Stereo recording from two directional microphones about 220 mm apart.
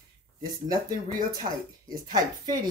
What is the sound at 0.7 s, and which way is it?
Speech, 15° right (ahead or behind).